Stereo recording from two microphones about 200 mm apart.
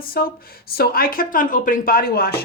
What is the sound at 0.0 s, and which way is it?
A woman's voice, 45° left (ahead or behind).